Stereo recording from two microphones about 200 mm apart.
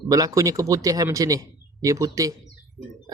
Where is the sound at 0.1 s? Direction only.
15° right (ahead or behind).